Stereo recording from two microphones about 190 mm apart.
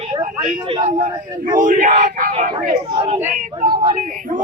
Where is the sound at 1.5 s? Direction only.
45° right (ahead or behind).